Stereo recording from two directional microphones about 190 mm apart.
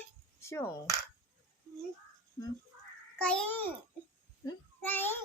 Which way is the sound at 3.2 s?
5° left (ahead or behind).